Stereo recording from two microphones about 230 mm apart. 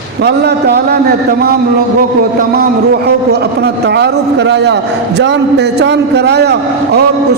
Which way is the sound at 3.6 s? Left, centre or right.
Right.